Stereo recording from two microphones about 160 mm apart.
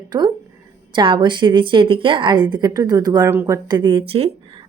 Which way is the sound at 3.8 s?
35° right (ahead or behind).